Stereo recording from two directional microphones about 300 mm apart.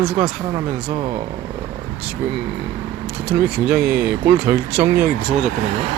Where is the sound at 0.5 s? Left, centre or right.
Centre.